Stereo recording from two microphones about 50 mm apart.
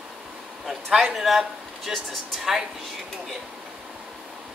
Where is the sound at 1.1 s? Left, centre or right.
Centre.